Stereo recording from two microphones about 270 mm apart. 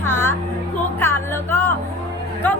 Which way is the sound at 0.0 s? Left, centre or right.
Centre.